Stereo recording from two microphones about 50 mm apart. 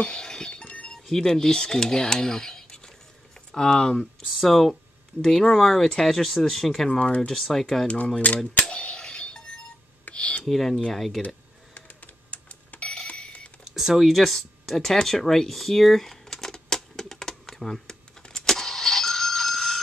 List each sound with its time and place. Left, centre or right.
0.0 s music: centre
0.9 s speech: centre
7.6 s speech: centre
8.2 s speech: left
8.6 s a sound: left
10.1 s a sound: left
10.4 s speech: centre
11.2 s telephone bell ringing: left
13.7 s a sound: centre